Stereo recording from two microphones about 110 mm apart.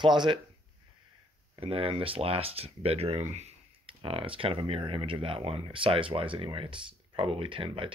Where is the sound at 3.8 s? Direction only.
55° right (ahead or behind).